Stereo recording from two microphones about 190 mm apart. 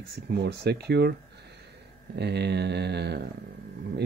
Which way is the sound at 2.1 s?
60° right (ahead or behind).